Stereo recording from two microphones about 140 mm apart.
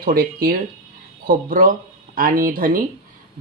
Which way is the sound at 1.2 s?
75° right (ahead or behind).